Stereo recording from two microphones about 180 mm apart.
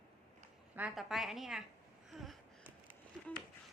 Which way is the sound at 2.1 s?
Centre (ahead or behind).